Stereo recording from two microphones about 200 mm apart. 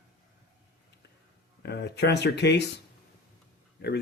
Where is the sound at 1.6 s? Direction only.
55° left (ahead or behind).